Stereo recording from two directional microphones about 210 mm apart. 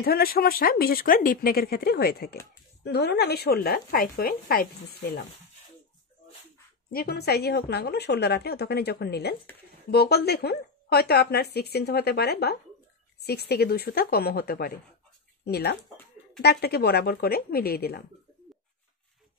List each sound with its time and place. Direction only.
0.0 s speech: 45° left (ahead or behind)
6.9 s speech: 45° left (ahead or behind)